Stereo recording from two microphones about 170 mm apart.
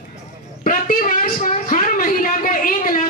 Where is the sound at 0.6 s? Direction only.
55° left (ahead or behind).